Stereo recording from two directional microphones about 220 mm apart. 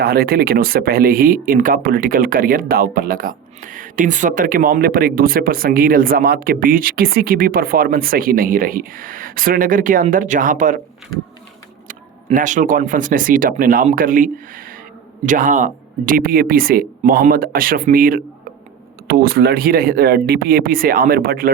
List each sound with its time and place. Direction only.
0.0 s speech: 45° right (ahead or behind)
11.9 s speech: 35° right (ahead or behind)